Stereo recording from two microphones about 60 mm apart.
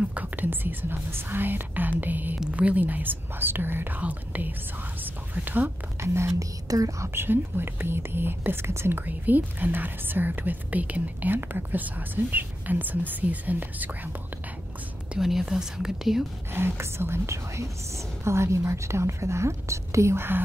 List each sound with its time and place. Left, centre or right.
0.1 s speech: right
5.9 s speech: right
6.7 s speech: right
7.2 s speech: right
15.1 s speech: centre
16.5 s speech: right